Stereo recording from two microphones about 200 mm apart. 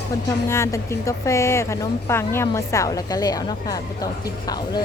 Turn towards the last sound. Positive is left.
turn(degrees=20)  # may be behind; listen again after turning